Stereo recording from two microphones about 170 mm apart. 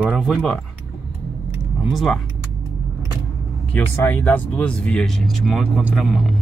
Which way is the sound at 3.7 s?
10° left (ahead or behind).